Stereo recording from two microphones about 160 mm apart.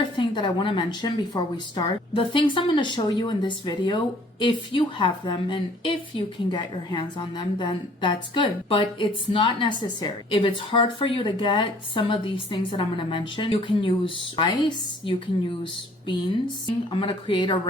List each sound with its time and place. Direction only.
0.3 s speech: 30° left (ahead or behind)
16.9 s speech: 30° left (ahead or behind)